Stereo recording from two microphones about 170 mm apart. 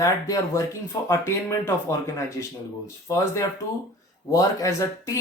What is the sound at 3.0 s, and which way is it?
Speech, 15° left (ahead or behind).